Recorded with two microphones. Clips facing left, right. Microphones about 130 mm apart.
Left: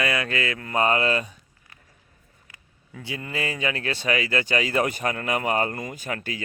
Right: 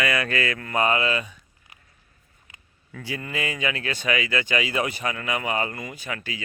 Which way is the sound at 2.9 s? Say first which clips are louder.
Right 1 dB; 20° left (ahead or behind).